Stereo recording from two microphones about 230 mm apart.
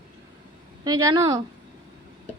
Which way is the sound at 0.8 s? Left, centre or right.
Centre.